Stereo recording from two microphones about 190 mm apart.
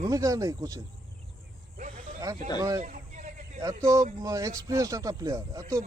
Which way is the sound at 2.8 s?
40° right (ahead or behind).